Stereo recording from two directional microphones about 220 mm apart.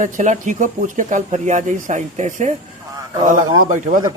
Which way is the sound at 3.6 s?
35° right (ahead or behind).